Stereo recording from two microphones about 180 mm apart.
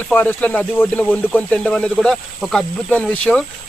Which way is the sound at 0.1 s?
10° left (ahead or behind).